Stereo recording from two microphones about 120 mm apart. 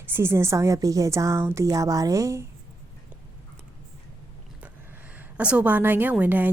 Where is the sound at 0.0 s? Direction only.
20° right (ahead or behind).